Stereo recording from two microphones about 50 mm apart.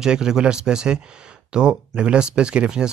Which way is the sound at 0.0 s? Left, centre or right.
Centre.